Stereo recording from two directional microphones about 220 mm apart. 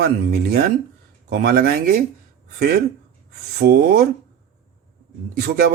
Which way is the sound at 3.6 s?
45° right (ahead or behind).